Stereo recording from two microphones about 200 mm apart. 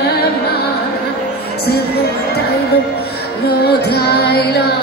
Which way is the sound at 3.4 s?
55° left (ahead or behind).